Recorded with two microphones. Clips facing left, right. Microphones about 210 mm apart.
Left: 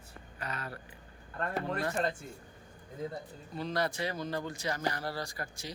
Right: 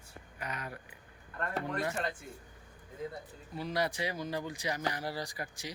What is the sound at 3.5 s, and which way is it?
Speech, 10° right (ahead or behind).